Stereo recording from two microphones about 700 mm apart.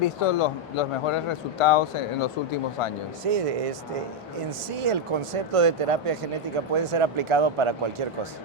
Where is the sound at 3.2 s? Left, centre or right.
Right.